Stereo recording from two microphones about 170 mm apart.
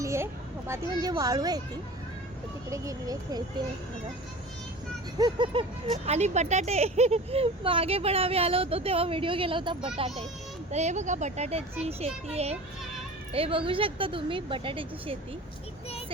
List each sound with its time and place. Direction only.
0.0 s a sound: 15° right (ahead or behind)
0.7 s speech: 20° right (ahead or behind)
2.6 s speech: 20° right (ahead or behind)
5.1 s speech: 25° right (ahead or behind)
6.1 s speech: 40° right (ahead or behind)
10.7 s speech: 40° right (ahead or behind)